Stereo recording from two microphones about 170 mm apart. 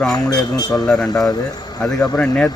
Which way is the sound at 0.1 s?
25° left (ahead or behind).